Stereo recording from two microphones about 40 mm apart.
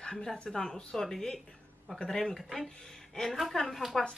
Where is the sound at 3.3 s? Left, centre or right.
Centre.